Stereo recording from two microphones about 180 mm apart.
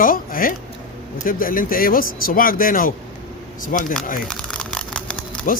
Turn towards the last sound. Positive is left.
turn(degrees=5)  # may be behind; listen again after turning